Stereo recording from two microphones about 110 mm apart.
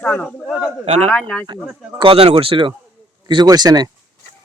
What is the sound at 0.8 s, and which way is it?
Speech, 80° right.